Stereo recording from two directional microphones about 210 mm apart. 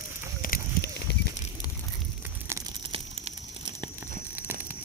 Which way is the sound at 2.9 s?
25° right (ahead or behind).